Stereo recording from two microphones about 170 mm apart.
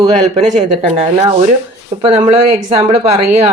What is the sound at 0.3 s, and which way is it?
Speech, 45° right (ahead or behind).